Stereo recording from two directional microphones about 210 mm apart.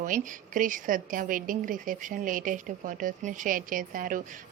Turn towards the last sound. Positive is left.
turn(degrees=-40)  # may be behind; listen again after turning